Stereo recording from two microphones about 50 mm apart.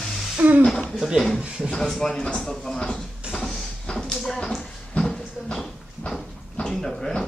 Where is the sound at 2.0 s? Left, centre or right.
Centre.